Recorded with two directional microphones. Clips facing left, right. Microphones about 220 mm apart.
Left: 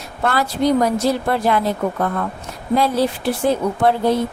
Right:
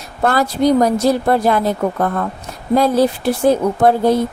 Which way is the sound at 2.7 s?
45° right (ahead or behind).